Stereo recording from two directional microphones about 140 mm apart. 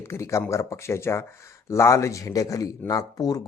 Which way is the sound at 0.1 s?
20° left (ahead or behind).